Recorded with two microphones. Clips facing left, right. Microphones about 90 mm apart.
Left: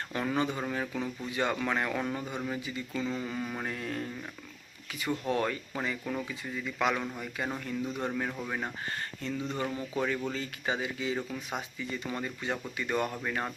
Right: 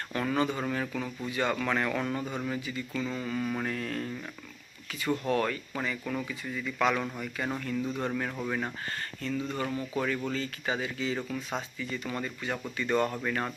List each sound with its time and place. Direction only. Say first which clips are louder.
0.1 s speech: right 2 dB; 15° left (ahead or behind)